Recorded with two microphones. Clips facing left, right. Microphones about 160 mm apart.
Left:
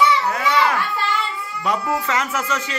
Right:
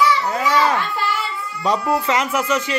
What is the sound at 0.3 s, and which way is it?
Children playing, 25° right (ahead or behind).